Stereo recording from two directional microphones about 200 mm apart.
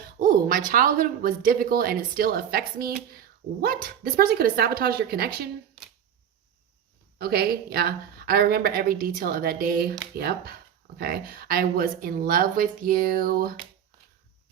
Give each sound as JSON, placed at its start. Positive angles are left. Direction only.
{"t": 0.2, "sound": "speech", "side_deg": -45}
{"t": 7.2, "sound": "speech", "side_deg": -50}